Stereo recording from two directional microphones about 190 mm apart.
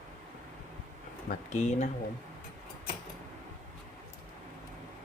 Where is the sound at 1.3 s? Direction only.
40° left (ahead or behind).